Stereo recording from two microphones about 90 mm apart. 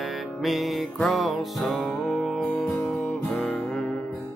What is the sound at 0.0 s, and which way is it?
Music, centre (ahead or behind).